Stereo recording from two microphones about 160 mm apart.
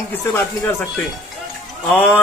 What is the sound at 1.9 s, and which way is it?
Speech, 10° left (ahead or behind).